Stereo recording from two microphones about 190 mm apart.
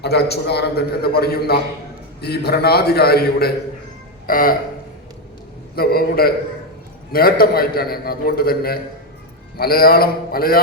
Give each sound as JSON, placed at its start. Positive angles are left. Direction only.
{"t": 0.0, "sound": "a man's voice", "side_deg": 60}
{"t": 5.7, "sound": "a man's voice", "side_deg": 55}